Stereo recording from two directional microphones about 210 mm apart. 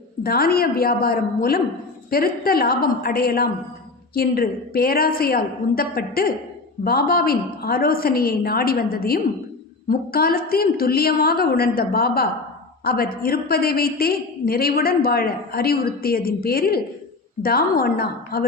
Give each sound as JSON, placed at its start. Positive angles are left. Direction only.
{"t": 0.2, "sound": "a woman's voice", "side_deg": 45}